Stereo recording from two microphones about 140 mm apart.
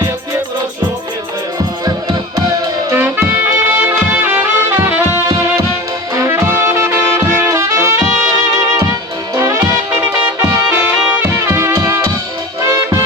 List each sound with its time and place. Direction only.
1.8 s music: 25° right (ahead or behind)
3.0 s music: 15° right (ahead or behind)
6.1 s brass instrument: 20° right (ahead or behind)
7.4 s music: 20° right (ahead or behind)
9.3 s music: 25° right (ahead or behind)
10.7 s music: 10° right (ahead or behind)